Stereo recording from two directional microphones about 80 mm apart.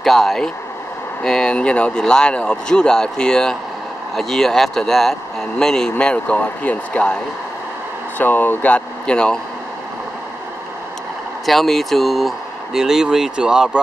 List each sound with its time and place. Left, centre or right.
0.0 s speech: centre
8.2 s speech: left
11.4 s speech: centre